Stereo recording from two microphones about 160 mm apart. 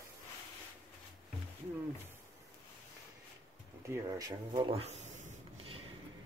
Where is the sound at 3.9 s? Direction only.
20° right (ahead or behind); by 5.8 s 40° right (ahead or behind).